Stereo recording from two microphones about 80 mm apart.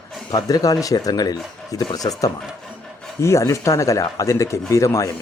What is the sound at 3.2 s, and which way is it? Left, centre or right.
Speech, left.